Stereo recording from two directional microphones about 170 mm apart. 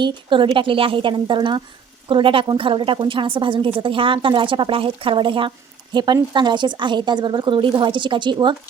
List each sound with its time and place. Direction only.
0.0 s a woman's voice: 30° right (ahead or behind)